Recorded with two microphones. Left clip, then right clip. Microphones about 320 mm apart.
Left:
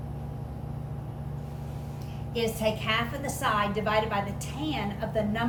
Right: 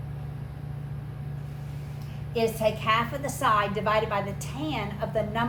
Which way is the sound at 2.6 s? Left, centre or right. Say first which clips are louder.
Right 3 dB; centre.